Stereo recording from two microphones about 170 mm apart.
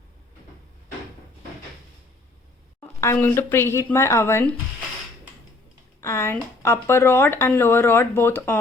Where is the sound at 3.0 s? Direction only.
15° left (ahead or behind).